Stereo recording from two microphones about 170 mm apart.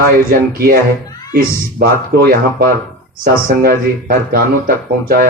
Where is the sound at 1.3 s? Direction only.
65° right (ahead or behind).